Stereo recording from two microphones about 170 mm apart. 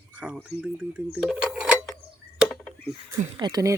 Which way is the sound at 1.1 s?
5° right (ahead or behind).